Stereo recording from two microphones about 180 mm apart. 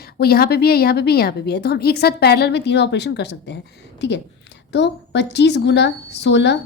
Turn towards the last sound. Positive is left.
turn(degrees=75)  # may be behind; listen again after turning